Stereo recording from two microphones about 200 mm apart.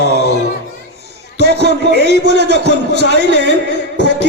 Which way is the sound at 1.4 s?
55° right (ahead or behind).